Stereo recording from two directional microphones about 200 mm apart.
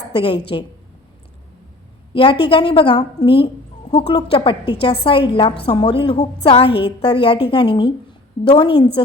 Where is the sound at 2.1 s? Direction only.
25° left (ahead or behind).